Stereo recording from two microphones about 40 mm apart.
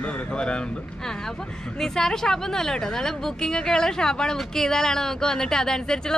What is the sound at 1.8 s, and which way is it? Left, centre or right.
A woman's voice, centre.